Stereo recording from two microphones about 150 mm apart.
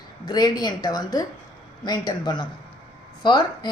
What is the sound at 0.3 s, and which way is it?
Speech, 25° left (ahead or behind).